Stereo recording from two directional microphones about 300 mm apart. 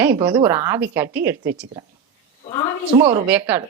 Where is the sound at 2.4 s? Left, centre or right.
Centre.